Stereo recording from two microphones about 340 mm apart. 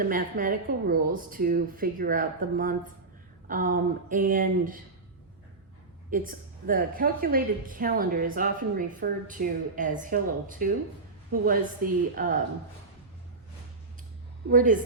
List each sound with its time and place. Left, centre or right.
0.0 s speech: right
6.1 s speech: right
14.5 s speech: right